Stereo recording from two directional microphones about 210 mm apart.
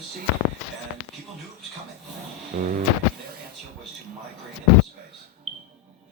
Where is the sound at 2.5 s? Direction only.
40° right (ahead or behind).